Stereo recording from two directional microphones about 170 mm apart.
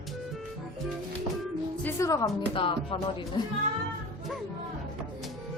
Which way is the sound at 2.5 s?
30° left (ahead or behind).